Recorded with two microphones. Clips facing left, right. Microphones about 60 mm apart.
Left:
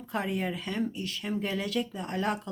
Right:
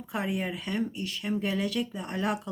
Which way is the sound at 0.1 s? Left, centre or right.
Centre.